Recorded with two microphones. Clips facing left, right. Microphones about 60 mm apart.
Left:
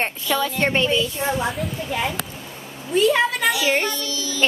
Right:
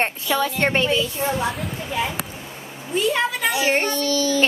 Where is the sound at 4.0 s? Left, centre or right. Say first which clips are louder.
Right 8 dB; right.